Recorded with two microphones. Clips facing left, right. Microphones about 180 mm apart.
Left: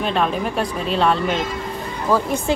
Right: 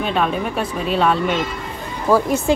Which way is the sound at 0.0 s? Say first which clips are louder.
Even; centre (ahead or behind).